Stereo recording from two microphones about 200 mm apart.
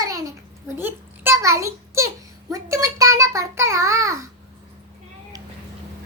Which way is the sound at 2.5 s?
15° right (ahead or behind).